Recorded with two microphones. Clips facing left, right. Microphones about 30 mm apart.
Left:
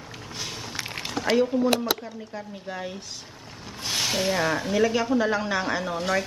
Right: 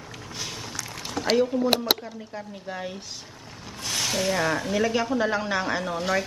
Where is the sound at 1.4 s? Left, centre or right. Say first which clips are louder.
Left 1 dB; centre.